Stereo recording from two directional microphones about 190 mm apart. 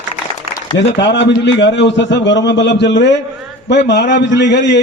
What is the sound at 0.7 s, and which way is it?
A man's voice, 65° left (ahead or behind).